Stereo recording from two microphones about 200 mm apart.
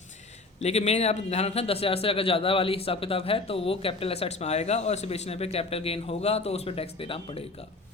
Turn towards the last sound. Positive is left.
turn(degrees=25)  # may be behind; listen again after turning